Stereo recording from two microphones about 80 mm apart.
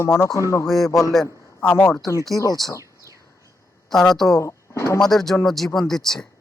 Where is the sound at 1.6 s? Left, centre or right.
Left.